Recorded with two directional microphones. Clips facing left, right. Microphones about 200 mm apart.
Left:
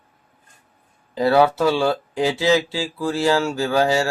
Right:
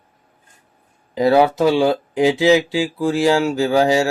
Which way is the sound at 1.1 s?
15° right (ahead or behind).